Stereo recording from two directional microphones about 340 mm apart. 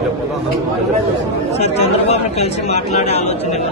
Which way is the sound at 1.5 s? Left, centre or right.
Centre.